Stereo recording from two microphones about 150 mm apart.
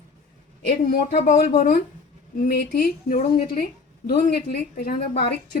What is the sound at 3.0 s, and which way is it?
Speech, 60° left (ahead or behind).